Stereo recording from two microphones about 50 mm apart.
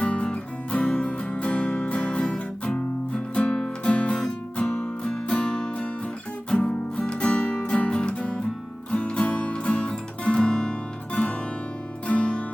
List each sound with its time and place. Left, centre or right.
0.0 s music: left
6.6 s music: left